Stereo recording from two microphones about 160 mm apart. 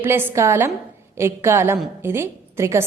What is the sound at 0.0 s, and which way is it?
A woman's voice, 15° right (ahead or behind).